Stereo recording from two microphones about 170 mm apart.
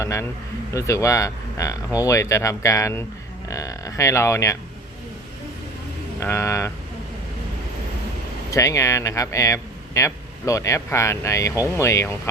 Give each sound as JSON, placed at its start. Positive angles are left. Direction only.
{"t": 0.0, "sound": "speech", "side_deg": 15}
{"t": 6.1, "sound": "speech", "side_deg": 15}
{"t": 8.4, "sound": "speech", "side_deg": 20}